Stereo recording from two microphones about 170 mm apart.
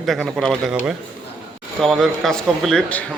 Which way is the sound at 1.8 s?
Centre (ahead or behind).